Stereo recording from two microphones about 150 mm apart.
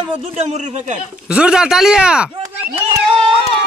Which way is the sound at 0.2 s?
50° right (ahead or behind).